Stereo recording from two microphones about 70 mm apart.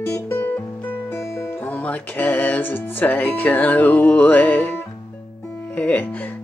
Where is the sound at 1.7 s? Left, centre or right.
Left.